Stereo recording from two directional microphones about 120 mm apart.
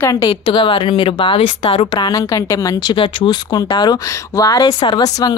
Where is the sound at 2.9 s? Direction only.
40° left (ahead or behind).